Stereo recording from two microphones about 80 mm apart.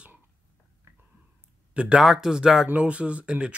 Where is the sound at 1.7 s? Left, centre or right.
Centre.